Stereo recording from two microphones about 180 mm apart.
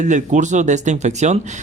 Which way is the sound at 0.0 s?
45° right (ahead or behind).